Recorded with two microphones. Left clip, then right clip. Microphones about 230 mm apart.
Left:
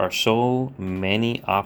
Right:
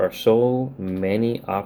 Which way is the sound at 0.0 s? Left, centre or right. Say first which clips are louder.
Right 2 dB; left.